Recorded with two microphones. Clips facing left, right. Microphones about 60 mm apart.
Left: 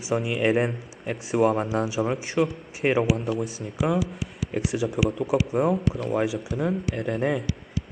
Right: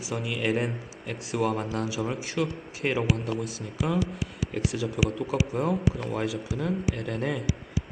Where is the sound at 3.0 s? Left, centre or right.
Centre.